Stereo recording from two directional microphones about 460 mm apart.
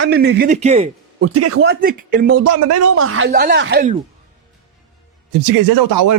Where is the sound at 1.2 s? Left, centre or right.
Right.